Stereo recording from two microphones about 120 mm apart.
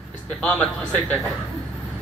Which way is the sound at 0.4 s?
10° left (ahead or behind).